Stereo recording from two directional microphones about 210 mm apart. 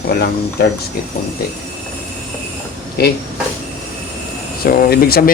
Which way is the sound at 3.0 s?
50° left (ahead or behind).